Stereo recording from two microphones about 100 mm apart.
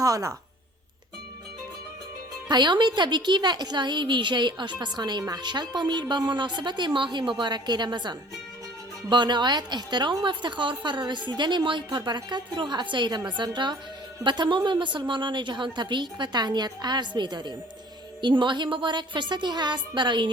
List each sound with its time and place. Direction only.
0.0 s a woman's voice: 35° right (ahead or behind)
2.5 s a woman's voice: 50° right (ahead or behind)